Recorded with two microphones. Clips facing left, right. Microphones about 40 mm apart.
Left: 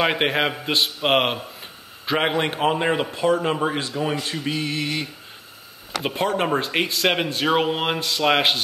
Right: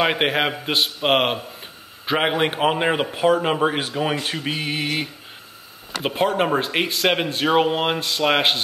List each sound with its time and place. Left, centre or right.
0.0 s a man's voice: centre
3.1 s speech: right
3.3 s a man's voice: centre
3.7 s speech: right
6.0 s speech: centre